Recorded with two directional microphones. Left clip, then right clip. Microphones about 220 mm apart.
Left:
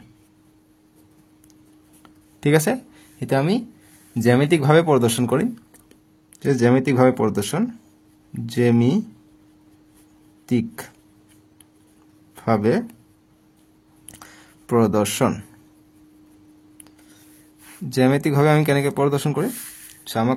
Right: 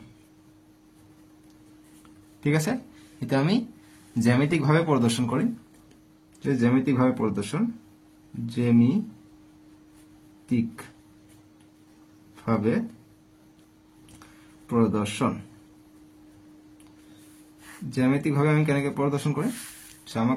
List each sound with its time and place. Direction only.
2.4 s speech: 45° left (ahead or behind)
10.4 s speech: 50° left (ahead or behind)
12.4 s speech: 45° left (ahead or behind)
14.7 s speech: 50° left (ahead or behind)
17.9 s speech: 50° left (ahead or behind)